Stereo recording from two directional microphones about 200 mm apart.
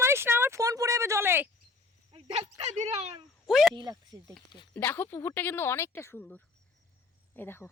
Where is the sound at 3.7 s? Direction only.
20° right (ahead or behind).